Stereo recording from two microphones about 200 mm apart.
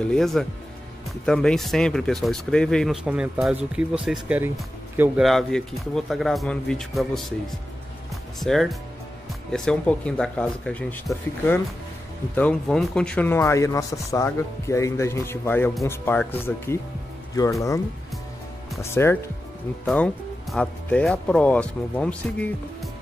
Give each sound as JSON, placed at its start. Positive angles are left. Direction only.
{"t": 0.0, "sound": "speech", "side_deg": 0}
{"t": 8.4, "sound": "speech", "side_deg": 0}
{"t": 18.8, "sound": "speech", "side_deg": 15}
{"t": 20.5, "sound": "speech", "side_deg": 5}